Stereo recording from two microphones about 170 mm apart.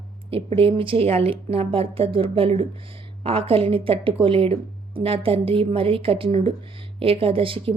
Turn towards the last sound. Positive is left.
turn(degrees=-30)  # may be behind; listen again after turning